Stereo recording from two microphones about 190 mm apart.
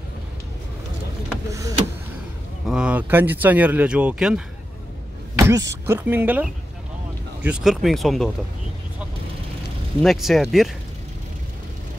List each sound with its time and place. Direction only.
1.5 s printer: 15° right (ahead or behind)
2.7 s speech: 5° right (ahead or behind)
5.4 s speech: 15° right (ahead or behind); by 8.3 s centre (ahead or behind)
10.0 s speech: centre (ahead or behind)